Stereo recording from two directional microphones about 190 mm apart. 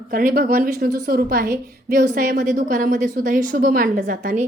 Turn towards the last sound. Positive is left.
turn(degrees=-40)  # may be behind; listen again after turning